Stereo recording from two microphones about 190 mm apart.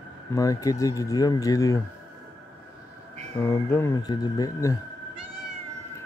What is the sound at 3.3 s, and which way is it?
Speech, 15° left (ahead or behind).